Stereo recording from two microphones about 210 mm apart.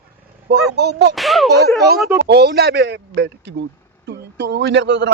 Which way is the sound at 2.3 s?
50° right (ahead or behind).